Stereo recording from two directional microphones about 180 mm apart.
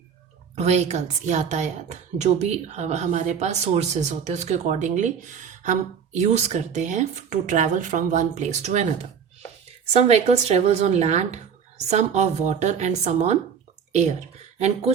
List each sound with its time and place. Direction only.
0.5 s a woman's voice: 35° right (ahead or behind)
9.9 s a woman's voice: 35° right (ahead or behind)